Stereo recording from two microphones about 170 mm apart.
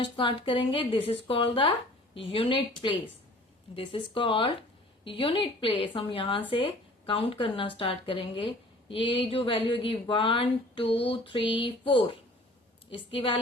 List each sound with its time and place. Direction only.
0.0 s a woman's voice: 30° left (ahead or behind)